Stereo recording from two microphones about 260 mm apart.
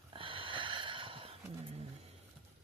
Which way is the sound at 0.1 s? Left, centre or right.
Centre.